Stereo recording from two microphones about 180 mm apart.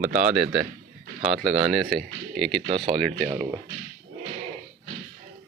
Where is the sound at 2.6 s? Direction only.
30° right (ahead or behind).